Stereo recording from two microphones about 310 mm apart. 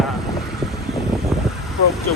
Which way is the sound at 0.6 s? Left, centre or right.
Centre.